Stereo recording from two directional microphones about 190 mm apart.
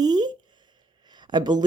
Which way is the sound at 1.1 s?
25° right (ahead or behind).